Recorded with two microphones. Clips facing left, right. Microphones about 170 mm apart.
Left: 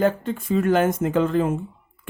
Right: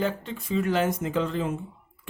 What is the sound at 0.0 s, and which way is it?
Speech, 50° left (ahead or behind).